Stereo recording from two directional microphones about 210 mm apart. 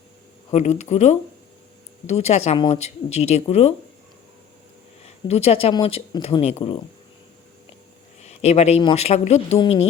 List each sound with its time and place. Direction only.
0.5 s speech: 30° left (ahead or behind)
5.0 s speech: 30° left (ahead or behind)
8.2 s speech: 30° left (ahead or behind)